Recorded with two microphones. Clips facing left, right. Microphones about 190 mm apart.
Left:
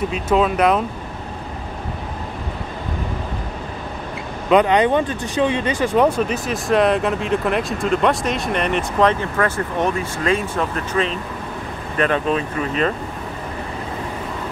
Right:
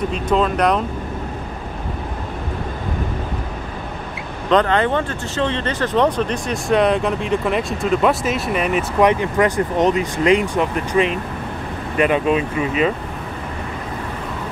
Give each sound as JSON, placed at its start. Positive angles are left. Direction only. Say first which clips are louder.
{"t": 0.1, "sound": "speech", "louder": "left 2 dB", "side_deg": 5}
{"t": 4.5, "sound": "speech", "louder": "left 2 dB", "side_deg": 15}
{"t": 9.1, "sound": "speech", "louder": "right 4 dB", "side_deg": -15}